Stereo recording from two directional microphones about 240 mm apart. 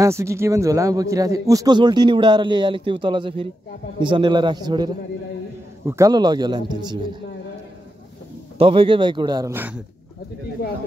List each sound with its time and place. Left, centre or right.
0.0 s a man's voice: centre
8.5 s a man's voice: right